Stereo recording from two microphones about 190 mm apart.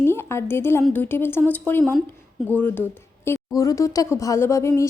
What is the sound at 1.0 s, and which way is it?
Speech, 10° left (ahead or behind).